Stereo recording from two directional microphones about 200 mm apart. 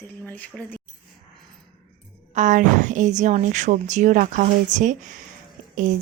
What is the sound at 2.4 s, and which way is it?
A woman's voice, 40° right (ahead or behind).